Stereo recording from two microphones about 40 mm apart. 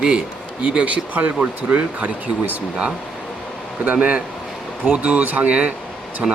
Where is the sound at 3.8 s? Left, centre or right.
Right.